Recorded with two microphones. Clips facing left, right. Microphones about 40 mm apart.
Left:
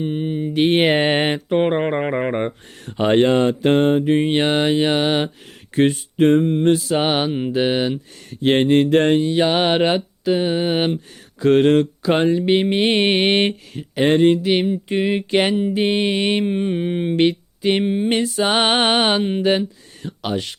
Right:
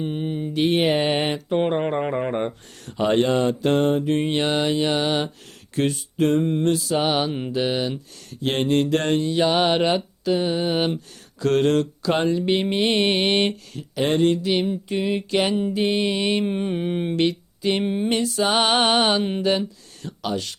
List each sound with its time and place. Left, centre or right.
0.0 s mantra: centre
0.5 s mantra: left
3.1 s speech: left
6.4 s a sound: centre
6.7 s mantra: left
7.5 s speech: left
16.4 s a sound: centre
17.2 s speech: left
17.8 s a sound: centre
18.1 s speech: left